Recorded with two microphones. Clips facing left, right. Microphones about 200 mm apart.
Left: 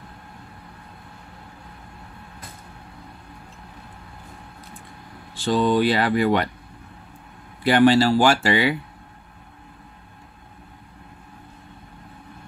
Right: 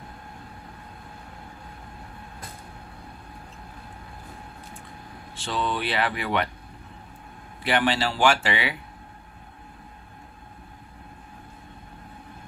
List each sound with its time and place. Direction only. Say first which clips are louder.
5.3 s speech: left 9 dB; 40° left (ahead or behind)
7.6 s speech: left 9 dB; 40° left (ahead or behind)